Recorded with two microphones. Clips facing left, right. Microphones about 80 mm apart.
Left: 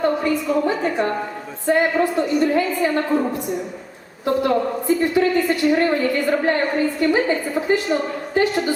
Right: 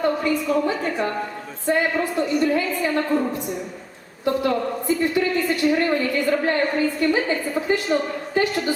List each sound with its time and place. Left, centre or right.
0.0 s a woman's voice: centre